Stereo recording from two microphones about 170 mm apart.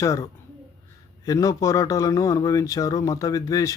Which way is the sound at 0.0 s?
20° left (ahead or behind).